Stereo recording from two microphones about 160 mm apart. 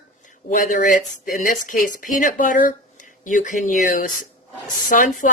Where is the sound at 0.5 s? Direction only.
55° left (ahead or behind).